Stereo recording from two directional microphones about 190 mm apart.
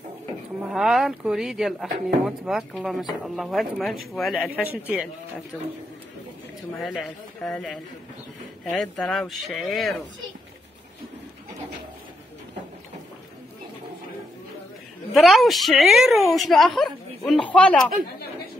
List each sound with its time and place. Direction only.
0.7 s speech: centre (ahead or behind)
6.8 s speech: centre (ahead or behind)
15.1 s speech: centre (ahead or behind)